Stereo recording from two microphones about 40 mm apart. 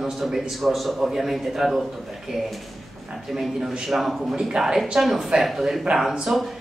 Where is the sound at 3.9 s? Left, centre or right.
Centre.